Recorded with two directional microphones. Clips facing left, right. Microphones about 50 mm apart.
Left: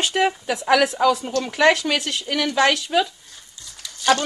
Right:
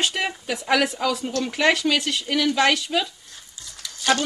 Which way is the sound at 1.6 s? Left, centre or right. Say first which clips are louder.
Left 3 dB; centre.